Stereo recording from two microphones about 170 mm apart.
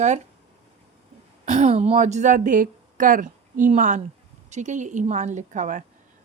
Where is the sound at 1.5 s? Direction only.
40° right (ahead or behind).